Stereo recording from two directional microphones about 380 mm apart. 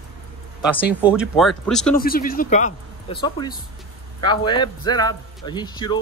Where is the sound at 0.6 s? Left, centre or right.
Centre.